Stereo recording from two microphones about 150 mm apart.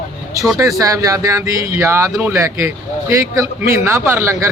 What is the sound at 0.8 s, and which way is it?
A man's voice, 20° right (ahead or behind).